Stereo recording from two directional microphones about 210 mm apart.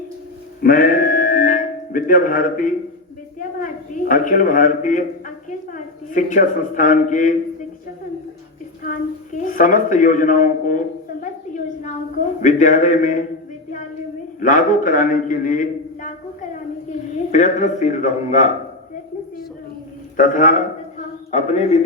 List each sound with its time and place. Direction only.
0.6 s music: 45° left (ahead or behind)
4.1 s a man's voice: 40° left (ahead or behind)
8.8 s a woman's voice: 40° left (ahead or behind)
14.4 s a man's voice: 40° left (ahead or behind)
17.3 s a man's voice: 35° left (ahead or behind)
20.1 s a man's voice: 40° left (ahead or behind)